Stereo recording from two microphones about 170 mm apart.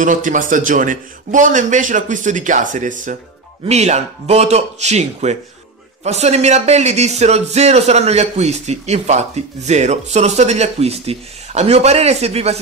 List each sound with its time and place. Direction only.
0.0 s a man's voice: 50° right (ahead or behind)